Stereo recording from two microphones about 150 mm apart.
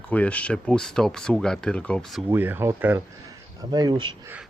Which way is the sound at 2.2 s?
15° right (ahead or behind).